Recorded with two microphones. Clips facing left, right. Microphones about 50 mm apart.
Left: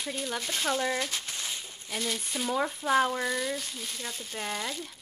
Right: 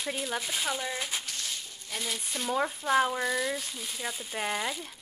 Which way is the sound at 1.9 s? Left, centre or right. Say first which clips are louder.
Left 2 dB; centre.